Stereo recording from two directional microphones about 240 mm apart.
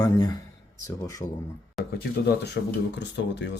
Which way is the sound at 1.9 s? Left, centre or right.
Left.